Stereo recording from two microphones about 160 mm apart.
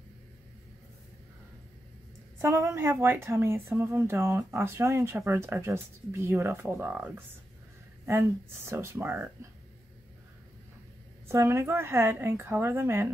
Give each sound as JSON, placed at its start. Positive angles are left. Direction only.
{"t": 2.3, "sound": "speech", "side_deg": -20}
{"t": 11.2, "sound": "speech", "side_deg": -15}